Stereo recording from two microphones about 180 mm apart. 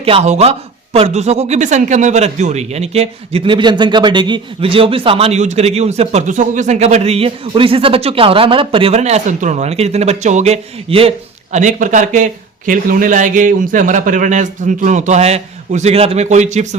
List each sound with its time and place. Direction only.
0.0 s speech: 35° right (ahead or behind)
11.5 s speech: 45° right (ahead or behind)